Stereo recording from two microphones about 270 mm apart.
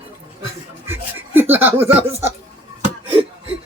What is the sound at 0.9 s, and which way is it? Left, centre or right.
Chuckle, centre.